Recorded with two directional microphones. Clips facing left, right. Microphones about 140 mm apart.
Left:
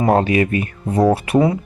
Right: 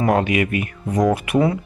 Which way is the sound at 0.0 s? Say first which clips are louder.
Left 3 dB; 30° left (ahead or behind).